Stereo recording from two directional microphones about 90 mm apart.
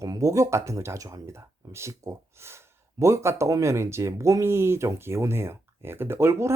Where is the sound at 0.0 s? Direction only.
40° right (ahead or behind).